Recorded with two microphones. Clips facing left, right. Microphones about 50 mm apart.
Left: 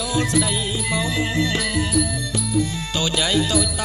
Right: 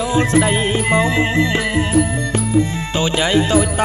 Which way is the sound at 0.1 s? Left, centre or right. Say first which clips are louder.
Right 6 dB; right.